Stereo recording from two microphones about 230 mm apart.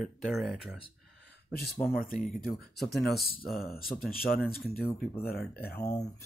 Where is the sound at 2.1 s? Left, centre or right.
Centre.